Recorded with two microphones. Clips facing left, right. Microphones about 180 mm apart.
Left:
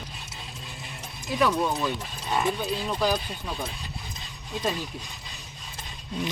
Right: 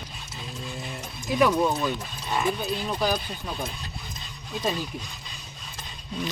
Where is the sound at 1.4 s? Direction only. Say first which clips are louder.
Right 2 dB; 10° right (ahead or behind).